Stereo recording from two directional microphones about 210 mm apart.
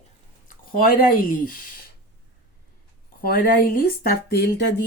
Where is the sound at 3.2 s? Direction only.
45° left (ahead or behind).